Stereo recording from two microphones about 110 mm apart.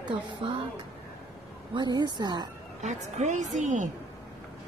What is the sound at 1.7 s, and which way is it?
Speech, 40° right (ahead or behind).